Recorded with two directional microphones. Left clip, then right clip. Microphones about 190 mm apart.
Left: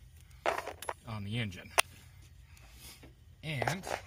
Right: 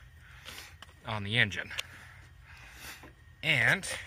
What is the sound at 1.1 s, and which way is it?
Speech, 35° right (ahead or behind).